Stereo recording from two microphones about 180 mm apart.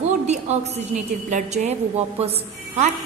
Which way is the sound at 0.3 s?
35° right (ahead or behind).